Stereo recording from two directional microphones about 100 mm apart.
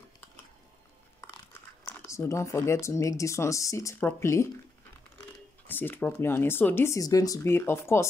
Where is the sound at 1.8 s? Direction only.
30° left (ahead or behind).